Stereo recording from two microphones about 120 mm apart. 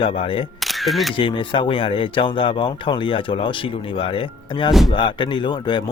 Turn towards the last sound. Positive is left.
turn(degrees=40)  # may be behind; listen again after turning